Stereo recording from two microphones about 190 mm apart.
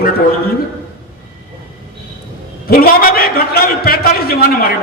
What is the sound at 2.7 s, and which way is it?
A man's voice, 50° left (ahead or behind).